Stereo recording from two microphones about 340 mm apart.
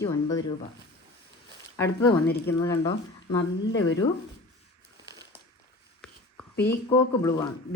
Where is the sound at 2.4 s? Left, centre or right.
Centre.